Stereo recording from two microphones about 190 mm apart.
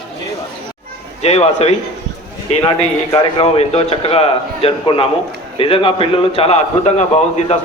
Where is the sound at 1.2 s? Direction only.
35° left (ahead or behind).